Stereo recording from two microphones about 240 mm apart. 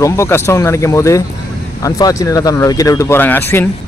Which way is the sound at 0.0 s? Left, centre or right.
Centre.